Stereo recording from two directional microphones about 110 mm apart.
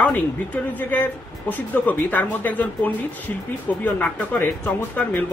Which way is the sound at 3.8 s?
15° left (ahead or behind).